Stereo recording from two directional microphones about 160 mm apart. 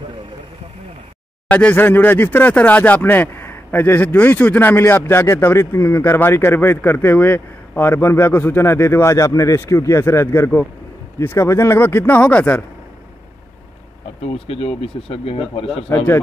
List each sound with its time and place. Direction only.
1.5 s speech: 10° left (ahead or behind)
14.2 s speech: 40° left (ahead or behind)